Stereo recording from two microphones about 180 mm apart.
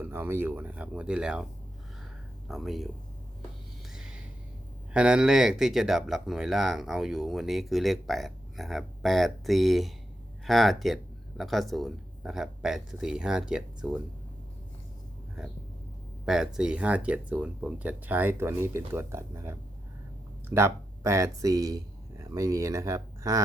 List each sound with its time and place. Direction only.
0.0 s speech: 10° right (ahead or behind)
2.5 s speech: centre (ahead or behind)
3.9 s a sound: 5° right (ahead or behind)
4.9 s speech: 5° right (ahead or behind)
16.2 s speech: 5° right (ahead or behind); by 23.4 s 20° right (ahead or behind)